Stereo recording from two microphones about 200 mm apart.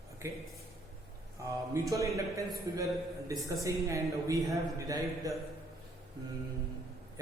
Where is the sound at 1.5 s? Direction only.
15° right (ahead or behind).